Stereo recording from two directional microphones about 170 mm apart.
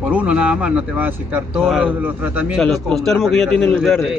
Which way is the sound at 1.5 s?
Centre (ahead or behind).